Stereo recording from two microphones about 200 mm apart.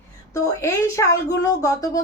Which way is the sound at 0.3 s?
15° left (ahead or behind).